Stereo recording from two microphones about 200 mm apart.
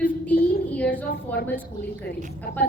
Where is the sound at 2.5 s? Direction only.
45° left (ahead or behind).